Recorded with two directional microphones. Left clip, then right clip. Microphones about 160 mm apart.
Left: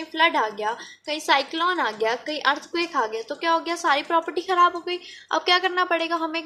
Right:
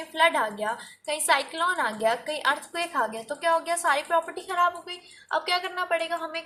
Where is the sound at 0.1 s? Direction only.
30° left (ahead or behind).